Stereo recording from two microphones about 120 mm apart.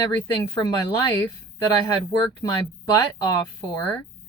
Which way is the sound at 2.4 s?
35° left (ahead or behind).